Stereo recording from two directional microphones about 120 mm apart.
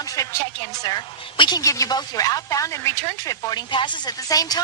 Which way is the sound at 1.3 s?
45° left (ahead or behind).